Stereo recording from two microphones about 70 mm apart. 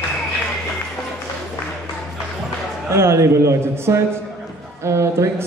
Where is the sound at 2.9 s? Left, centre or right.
Right.